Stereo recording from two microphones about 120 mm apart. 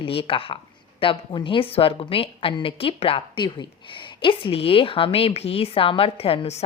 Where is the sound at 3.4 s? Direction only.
40° left (ahead or behind).